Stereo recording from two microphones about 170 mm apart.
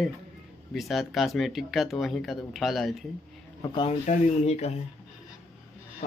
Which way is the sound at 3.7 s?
30° left (ahead or behind).